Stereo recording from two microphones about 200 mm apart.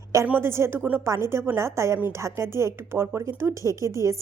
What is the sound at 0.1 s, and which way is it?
A woman's voice, 15° right (ahead or behind).